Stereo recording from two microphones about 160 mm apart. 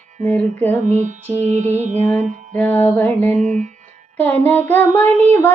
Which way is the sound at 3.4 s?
50° right (ahead or behind).